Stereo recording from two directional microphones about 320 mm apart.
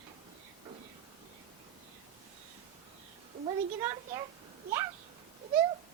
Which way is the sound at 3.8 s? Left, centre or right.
Centre.